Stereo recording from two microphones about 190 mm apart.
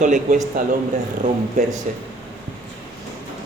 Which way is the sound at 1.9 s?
40° right (ahead or behind).